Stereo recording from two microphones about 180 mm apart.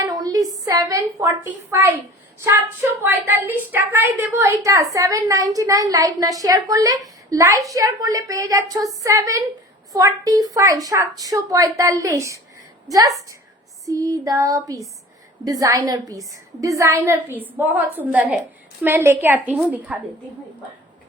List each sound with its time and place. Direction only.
0.1 s a sound: 20° right (ahead or behind)
0.6 s a woman's voice: 20° right (ahead or behind)
3.0 s a woman's voice: 10° right (ahead or behind)
13.8 s a woman's voice: 20° right (ahead or behind)